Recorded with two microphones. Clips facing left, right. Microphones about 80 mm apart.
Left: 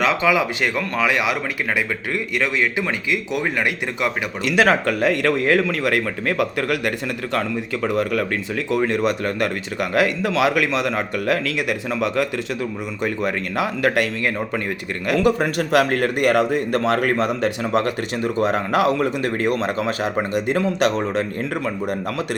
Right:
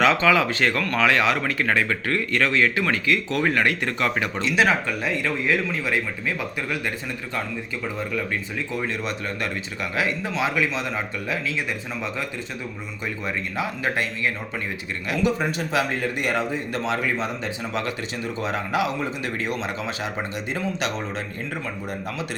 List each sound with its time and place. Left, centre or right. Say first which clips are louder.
0.2 s speech: left 1 dB; centre
4.4 s a man's voice: left 5 dB; left
8.7 s a man's voice: left 10 dB; left
13.2 s speech: left 2 dB; left
15.1 s a man's voice: left 5 dB; left